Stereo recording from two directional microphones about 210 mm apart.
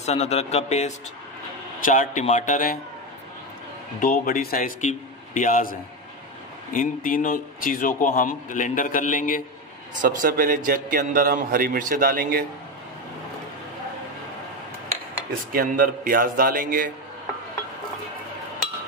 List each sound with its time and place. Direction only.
0.0 s a man's voice: 30° left (ahead or behind)
4.0 s a man's voice: 45° left (ahead or behind)
10.0 s a man's voice: 40° right (ahead or behind)
15.5 s a man's voice: 40° right (ahead or behind)